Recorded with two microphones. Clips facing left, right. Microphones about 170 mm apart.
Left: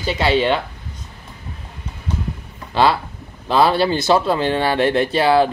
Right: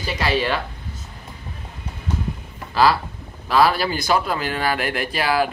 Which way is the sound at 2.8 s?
25° left (ahead or behind).